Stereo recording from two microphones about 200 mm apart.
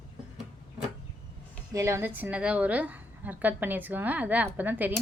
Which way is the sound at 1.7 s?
15° right (ahead or behind).